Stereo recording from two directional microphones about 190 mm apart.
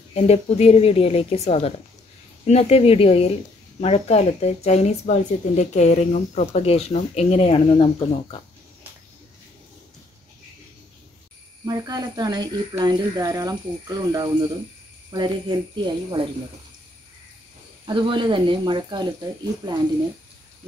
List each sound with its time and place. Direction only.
0.1 s speech: 35° left (ahead or behind)
11.6 s speech: 20° right (ahead or behind)
17.8 s speech: 25° right (ahead or behind)